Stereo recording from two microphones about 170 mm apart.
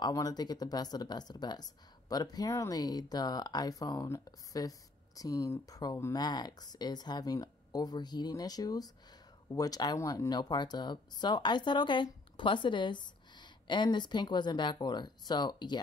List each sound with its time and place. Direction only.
0.0 s speech: 25° left (ahead or behind)